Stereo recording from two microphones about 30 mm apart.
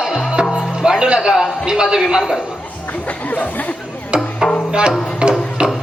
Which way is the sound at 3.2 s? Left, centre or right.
Left.